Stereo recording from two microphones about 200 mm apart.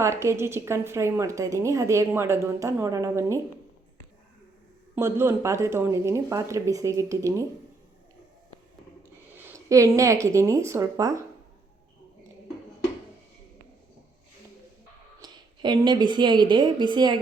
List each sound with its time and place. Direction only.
0.0 s a woman's voice: 15° right (ahead or behind)
4.9 s a woman's voice: 10° right (ahead or behind)
9.3 s speech: 15° right (ahead or behind)
15.2 s a woman's voice: 20° right (ahead or behind)